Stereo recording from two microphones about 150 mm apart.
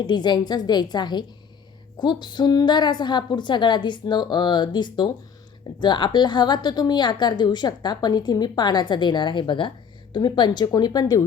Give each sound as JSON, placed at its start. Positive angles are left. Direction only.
{"t": 0.0, "sound": "a woman's voice", "side_deg": 30}